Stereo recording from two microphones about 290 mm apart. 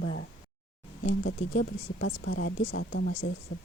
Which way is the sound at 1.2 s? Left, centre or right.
Left.